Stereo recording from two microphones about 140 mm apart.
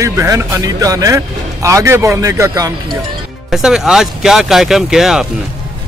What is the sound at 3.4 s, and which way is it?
Speech, 5° right (ahead or behind).